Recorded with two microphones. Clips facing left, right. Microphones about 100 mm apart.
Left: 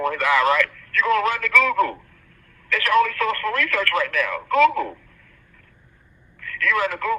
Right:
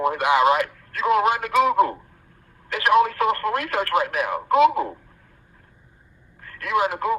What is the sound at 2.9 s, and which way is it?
Speech, 25° right (ahead or behind).